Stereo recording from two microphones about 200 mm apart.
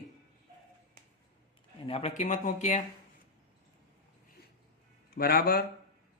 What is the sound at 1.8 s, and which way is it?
Speech, 30° left (ahead or behind).